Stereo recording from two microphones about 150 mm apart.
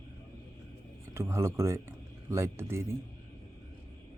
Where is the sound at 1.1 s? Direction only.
15° right (ahead or behind).